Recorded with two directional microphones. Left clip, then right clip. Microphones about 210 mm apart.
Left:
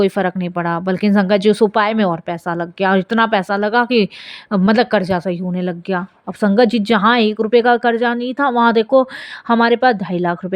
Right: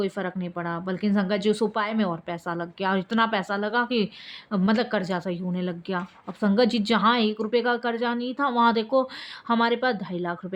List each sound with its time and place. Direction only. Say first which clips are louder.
0.0 s speech: left 12 dB; 35° left (ahead or behind)